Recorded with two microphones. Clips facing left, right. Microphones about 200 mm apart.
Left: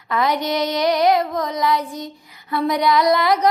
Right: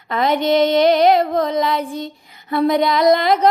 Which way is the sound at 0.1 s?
25° right (ahead or behind).